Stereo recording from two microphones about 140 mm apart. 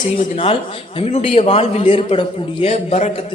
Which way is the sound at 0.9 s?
45° left (ahead or behind).